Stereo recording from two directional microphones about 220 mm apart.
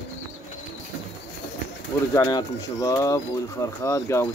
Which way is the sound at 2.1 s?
15° left (ahead or behind).